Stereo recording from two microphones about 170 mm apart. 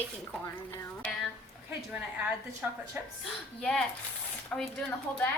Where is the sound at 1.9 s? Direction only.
10° right (ahead or behind).